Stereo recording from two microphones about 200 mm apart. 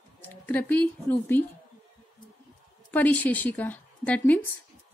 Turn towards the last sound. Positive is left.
turn(degrees=5)  # may be behind; listen again after turning